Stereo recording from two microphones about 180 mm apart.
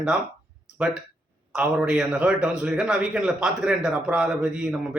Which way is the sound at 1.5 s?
5° right (ahead or behind).